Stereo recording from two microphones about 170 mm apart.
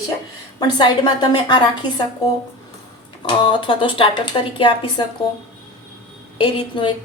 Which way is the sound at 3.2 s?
30° left (ahead or behind).